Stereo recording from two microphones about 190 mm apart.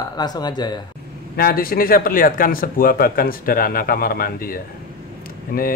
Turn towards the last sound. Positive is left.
turn(degrees=50)  # may be behind; listen again after turning